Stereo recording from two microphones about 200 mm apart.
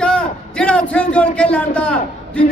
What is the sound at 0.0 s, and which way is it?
A man's voice, 5° left (ahead or behind).